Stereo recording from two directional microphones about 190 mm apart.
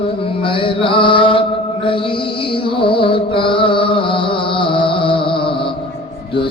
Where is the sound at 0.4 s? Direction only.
25° left (ahead or behind).